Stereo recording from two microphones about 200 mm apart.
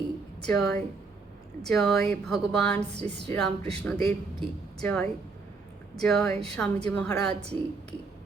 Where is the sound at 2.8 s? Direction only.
35° right (ahead or behind).